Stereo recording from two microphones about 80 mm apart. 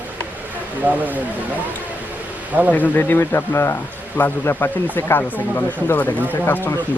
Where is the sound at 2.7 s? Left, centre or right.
Left.